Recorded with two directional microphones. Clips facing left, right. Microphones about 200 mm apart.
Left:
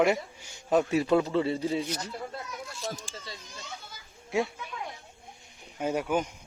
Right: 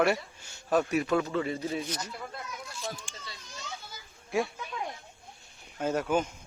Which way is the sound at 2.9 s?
35° left (ahead or behind).